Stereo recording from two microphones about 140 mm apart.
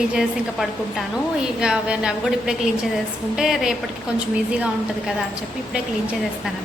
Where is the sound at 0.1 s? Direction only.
5° right (ahead or behind).